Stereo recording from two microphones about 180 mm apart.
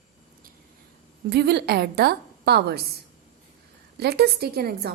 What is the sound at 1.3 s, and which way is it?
A woman's voice, 65° right (ahead or behind).